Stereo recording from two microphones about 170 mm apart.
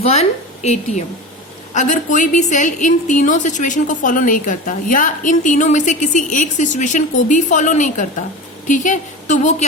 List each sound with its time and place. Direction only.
0.0 s a woman's voice: 40° left (ahead or behind)